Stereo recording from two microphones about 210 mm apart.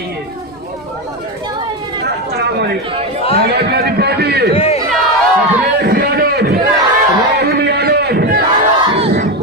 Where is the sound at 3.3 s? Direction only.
50° right (ahead or behind).